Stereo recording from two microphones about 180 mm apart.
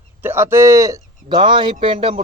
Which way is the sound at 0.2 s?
10° right (ahead or behind).